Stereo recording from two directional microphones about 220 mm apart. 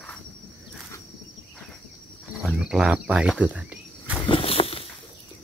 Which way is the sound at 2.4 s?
Centre (ahead or behind).